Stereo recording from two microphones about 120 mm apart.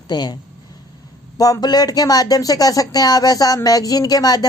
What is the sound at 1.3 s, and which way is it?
Speech, 30° left (ahead or behind).